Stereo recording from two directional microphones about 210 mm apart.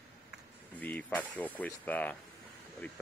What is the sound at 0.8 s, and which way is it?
Speech, 10° left (ahead or behind).